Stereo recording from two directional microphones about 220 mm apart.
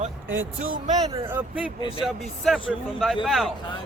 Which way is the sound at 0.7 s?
30° right (ahead or behind).